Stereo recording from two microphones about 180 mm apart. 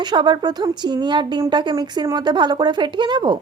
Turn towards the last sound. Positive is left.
turn(degrees=-25)  # may be behind; listen again after turning